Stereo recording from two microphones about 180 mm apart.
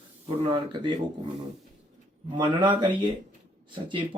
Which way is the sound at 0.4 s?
25° right (ahead or behind).